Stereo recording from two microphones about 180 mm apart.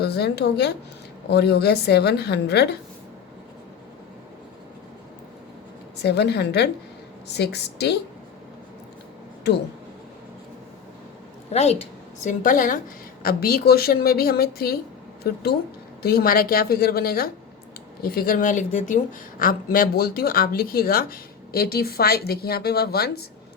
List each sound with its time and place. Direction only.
0.0 s a woman's voice: 65° left (ahead or behind)
6.0 s a woman's voice: 70° left (ahead or behind)
9.5 s a woman's voice: 70° left (ahead or behind)
11.5 s a woman's voice: 35° left (ahead or behind); by 23.2 s 60° left (ahead or behind)